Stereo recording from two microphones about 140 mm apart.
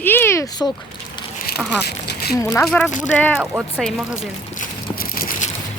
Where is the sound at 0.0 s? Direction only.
15° left (ahead or behind).